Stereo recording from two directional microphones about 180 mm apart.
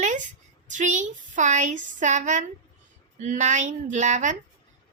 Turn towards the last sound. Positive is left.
turn(degrees=-40)  # may be behind; listen again after turning